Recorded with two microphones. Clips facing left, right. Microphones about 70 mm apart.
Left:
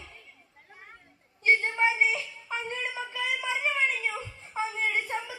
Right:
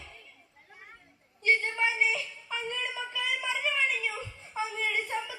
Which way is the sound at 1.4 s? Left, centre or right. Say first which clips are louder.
Left 3 dB; left.